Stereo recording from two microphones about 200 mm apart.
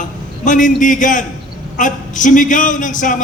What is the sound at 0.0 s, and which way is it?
A man's voice, 40° left (ahead or behind).